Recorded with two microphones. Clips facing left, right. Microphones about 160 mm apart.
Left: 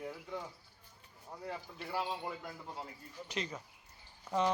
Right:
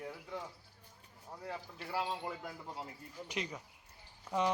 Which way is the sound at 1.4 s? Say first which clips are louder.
Left 1 dB; centre (ahead or behind).